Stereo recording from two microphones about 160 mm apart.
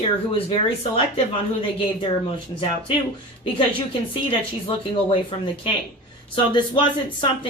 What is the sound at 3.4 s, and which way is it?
Speech, 35° left (ahead or behind).